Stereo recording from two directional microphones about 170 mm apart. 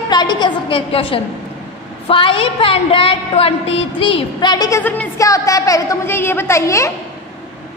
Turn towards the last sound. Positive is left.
turn(degrees=15)  # may be behind; listen again after turning